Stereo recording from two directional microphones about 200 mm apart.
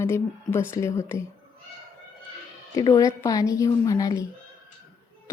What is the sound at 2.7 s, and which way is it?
Speech, 20° left (ahead or behind).